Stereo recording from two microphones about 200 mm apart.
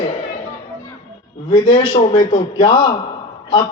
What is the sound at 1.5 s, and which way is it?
A man's voice, 25° left (ahead or behind).